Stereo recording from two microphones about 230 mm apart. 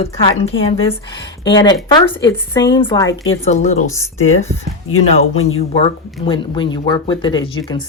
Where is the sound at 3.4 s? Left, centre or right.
Left.